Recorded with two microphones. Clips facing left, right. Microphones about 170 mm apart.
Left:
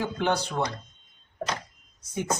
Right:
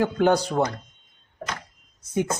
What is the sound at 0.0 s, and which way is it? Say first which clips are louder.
Speech: right 7 dB; 45° right (ahead or behind).